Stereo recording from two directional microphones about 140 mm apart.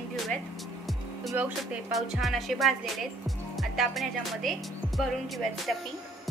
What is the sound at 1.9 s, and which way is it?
Speech, centre (ahead or behind).